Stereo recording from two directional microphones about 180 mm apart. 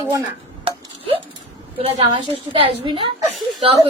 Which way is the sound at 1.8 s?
30° right (ahead or behind).